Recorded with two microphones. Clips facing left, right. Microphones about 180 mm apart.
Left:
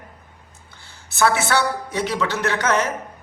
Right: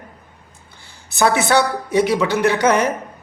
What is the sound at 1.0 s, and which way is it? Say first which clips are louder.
A woman's voice: right 3 dB; 15° right (ahead or behind).